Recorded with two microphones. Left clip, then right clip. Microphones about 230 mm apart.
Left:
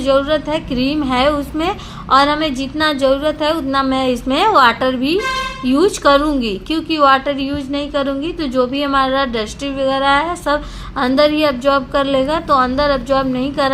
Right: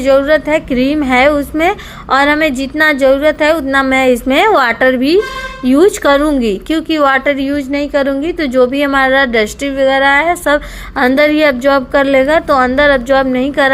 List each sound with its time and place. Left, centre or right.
0.1 s a woman's voice: right